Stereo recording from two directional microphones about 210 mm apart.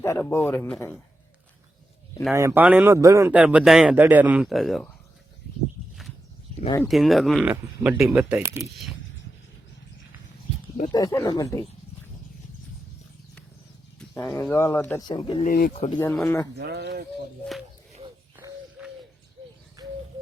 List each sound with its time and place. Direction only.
0.0 s speech: 10° left (ahead or behind)
2.3 s speech: 15° right (ahead or behind)
6.8 s speech: centre (ahead or behind)
10.9 s speech: 15° left (ahead or behind)
14.4 s speech: 10° left (ahead or behind)
15.4 s speech: 45° left (ahead or behind)
16.0 s speech: 5° left (ahead or behind)
16.6 s speech: 50° right (ahead or behind)
18.3 s bird: 10° right (ahead or behind)